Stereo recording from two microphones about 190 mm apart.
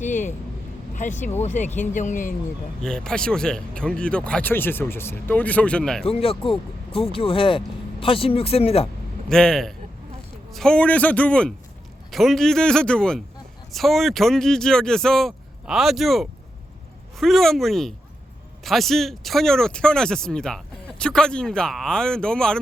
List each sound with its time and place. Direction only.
0.0 s a sound: 40° left (ahead or behind)
0.9 s speech: 40° left (ahead or behind)
2.8 s speech: 5° left (ahead or behind)
6.1 s speech: 30° left (ahead or behind)
9.3 s speech: 5° left (ahead or behind)